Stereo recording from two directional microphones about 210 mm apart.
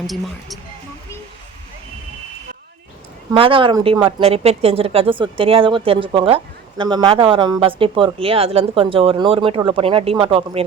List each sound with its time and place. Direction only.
0.1 s speech: centre (ahead or behind)
3.3 s speech: 25° right (ahead or behind)